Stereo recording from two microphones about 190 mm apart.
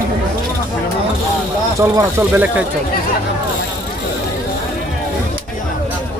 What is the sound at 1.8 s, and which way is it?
Speech, 10° right (ahead or behind).